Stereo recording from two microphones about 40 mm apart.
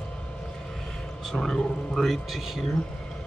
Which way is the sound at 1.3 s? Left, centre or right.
Centre.